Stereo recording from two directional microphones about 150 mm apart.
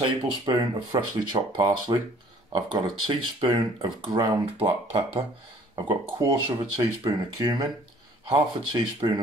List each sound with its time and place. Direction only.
0.0 s speech: 30° right (ahead or behind)
4.6 s speech: 40° right (ahead or behind)
5.8 s speech: 25° right (ahead or behind)